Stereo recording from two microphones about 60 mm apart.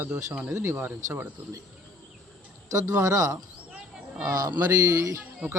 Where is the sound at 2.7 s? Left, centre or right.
Right.